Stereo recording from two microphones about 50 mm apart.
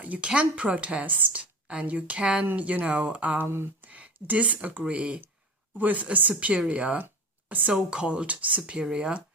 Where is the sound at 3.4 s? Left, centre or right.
Right.